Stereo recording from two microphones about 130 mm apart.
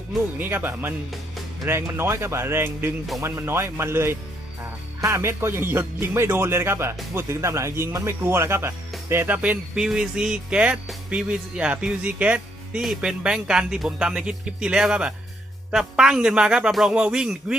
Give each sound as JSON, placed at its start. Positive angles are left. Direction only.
{"t": 0.3, "sound": "speech", "side_deg": -15}